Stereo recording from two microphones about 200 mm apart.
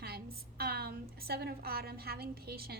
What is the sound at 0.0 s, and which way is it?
A woman's voice, 50° right (ahead or behind).